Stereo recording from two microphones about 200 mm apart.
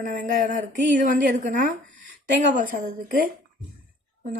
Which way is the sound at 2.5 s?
45° right (ahead or behind).